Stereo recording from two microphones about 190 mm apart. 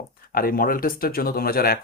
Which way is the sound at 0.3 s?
50° left (ahead or behind).